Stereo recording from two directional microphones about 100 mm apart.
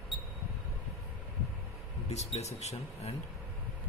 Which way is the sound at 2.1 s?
90° left.